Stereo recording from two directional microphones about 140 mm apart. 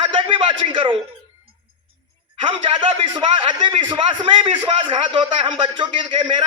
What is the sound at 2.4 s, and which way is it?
A man's voice, 35° right (ahead or behind).